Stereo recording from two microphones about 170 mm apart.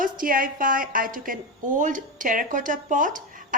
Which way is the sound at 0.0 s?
55° right (ahead or behind).